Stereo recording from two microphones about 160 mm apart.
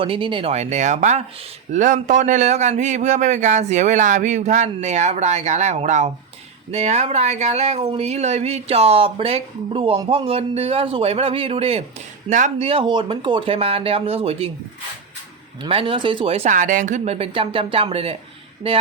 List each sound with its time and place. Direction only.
0.0 s speech: 35° right (ahead or behind)
12.3 s speech: 50° right (ahead or behind)
12.6 s speech: 35° right (ahead or behind)
15.6 s speech: 35° right (ahead or behind)